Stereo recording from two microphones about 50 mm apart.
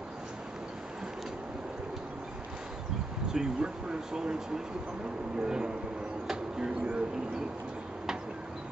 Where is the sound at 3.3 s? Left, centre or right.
Centre.